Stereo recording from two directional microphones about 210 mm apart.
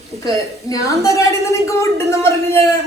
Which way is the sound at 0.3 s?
15° left (ahead or behind).